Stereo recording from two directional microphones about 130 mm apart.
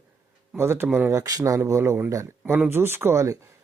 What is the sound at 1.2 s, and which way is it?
Speech, 25° right (ahead or behind).